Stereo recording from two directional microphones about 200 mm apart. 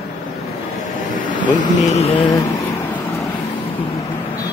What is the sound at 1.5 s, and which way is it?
Speech, 35° left (ahead or behind).